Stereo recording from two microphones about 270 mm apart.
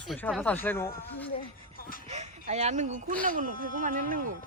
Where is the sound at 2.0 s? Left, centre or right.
Right.